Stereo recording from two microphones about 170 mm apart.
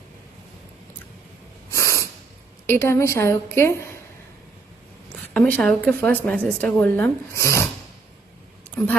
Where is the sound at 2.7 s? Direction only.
15° left (ahead or behind).